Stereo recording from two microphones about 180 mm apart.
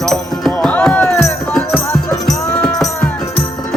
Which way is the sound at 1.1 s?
15° left (ahead or behind).